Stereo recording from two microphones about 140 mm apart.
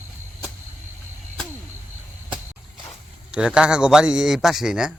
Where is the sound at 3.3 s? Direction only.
5° right (ahead or behind).